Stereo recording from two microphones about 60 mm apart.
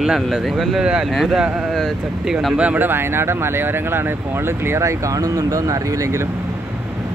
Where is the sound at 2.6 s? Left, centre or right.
Right.